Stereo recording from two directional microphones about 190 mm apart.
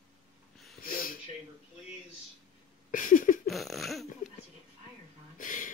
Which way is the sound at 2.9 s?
45° left (ahead or behind).